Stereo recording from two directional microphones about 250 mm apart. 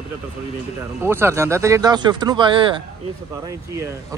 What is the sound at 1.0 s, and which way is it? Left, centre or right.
Speech, centre.